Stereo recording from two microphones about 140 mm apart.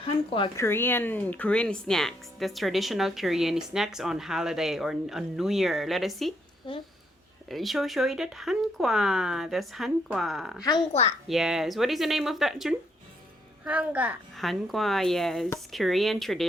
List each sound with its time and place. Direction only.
0.0 s speech: 40° left (ahead or behind)
0.5 s speech: 20° left (ahead or behind); by 6.3 s centre (ahead or behind)
6.7 s a sound: 35° left (ahead or behind)
7.4 s a child's voice: centre (ahead or behind)
14.3 s speech: centre (ahead or behind)